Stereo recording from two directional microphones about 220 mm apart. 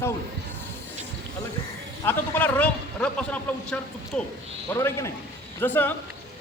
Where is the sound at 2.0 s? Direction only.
10° left (ahead or behind).